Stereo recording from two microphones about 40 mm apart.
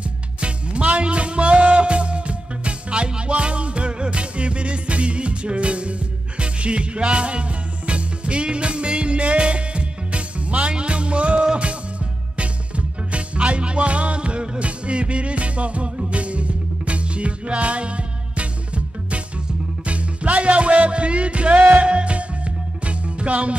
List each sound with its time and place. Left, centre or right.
0.4 s music: right
13.1 s music: right
19.9 s music: right